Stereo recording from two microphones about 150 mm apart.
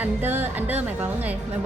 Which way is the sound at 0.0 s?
15° right (ahead or behind).